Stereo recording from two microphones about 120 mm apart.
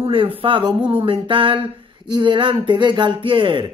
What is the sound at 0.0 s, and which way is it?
Speech, 50° right (ahead or behind).